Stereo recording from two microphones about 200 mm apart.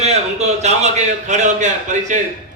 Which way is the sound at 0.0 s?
35° right (ahead or behind).